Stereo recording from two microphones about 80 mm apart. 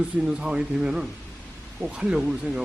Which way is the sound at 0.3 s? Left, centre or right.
Centre.